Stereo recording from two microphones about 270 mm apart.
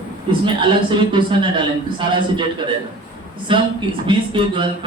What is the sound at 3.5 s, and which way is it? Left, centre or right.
A man's voice, centre.